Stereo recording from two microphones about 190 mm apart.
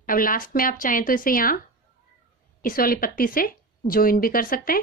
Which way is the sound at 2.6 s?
50° left (ahead or behind).